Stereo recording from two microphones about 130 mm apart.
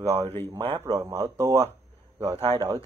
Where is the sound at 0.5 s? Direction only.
40° right (ahead or behind).